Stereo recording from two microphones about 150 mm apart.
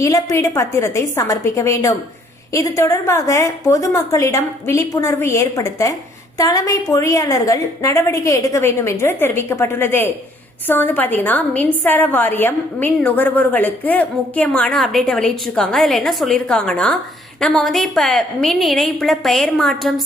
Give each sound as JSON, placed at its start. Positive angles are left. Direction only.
{"t": 0.0, "sound": "a woman's voice", "side_deg": 20}